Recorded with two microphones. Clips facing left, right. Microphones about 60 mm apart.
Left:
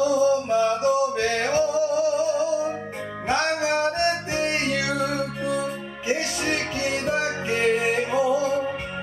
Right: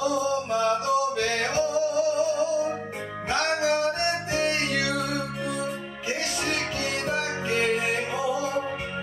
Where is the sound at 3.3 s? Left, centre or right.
Left; by 8.5 s centre.